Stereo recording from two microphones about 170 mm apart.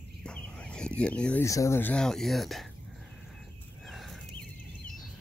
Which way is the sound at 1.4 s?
15° left (ahead or behind).